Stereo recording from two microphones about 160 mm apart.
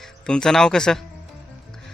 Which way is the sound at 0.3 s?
5° left (ahead or behind).